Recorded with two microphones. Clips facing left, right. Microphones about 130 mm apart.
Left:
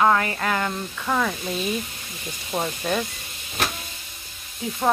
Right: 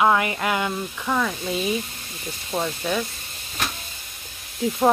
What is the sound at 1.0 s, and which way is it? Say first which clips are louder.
Speech: even; centre (ahead or behind).